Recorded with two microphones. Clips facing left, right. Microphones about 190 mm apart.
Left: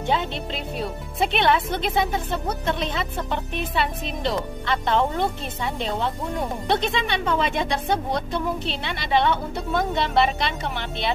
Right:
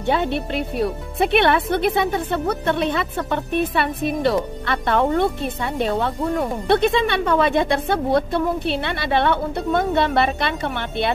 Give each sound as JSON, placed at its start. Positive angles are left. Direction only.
{"t": 0.1, "sound": "speech", "side_deg": -60}